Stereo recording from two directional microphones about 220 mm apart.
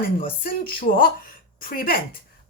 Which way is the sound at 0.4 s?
40° left (ahead or behind).